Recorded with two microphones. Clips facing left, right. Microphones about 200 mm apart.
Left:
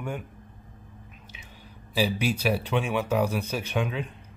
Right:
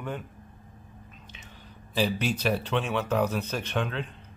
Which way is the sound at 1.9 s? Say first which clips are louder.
Left 1 dB; 10° left (ahead or behind).